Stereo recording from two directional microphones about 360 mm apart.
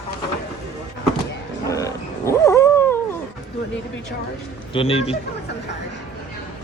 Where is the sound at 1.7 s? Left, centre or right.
Centre.